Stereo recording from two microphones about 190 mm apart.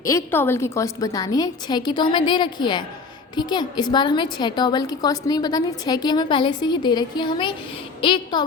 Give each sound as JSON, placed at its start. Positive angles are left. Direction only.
{"t": 0.0, "sound": "a woman's voice", "side_deg": 15}